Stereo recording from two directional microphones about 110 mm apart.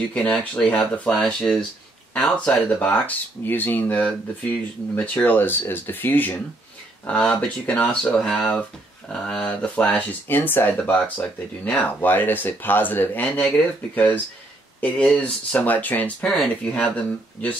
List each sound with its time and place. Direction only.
0.1 s speech: 15° left (ahead or behind)
1.2 s speech: centre (ahead or behind); by 6.3 s 15° left (ahead or behind)
7.3 s speech: 15° left (ahead or behind)